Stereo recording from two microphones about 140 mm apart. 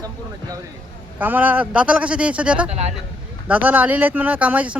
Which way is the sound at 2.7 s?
50° right (ahead or behind).